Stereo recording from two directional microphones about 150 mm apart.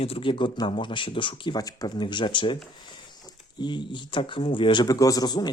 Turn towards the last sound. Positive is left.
turn(degrees=30)  # may be behind; listen again after turning